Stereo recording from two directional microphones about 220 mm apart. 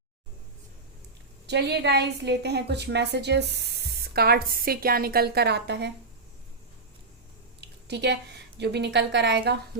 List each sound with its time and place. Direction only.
1.5 s a woman's voice: 50° right (ahead or behind)
7.6 s a woman's voice: 50° right (ahead or behind)